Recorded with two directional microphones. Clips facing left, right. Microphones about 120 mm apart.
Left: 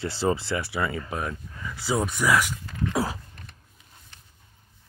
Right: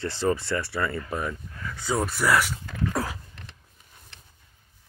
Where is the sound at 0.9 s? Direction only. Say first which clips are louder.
Right 1 dB; 5° left (ahead or behind).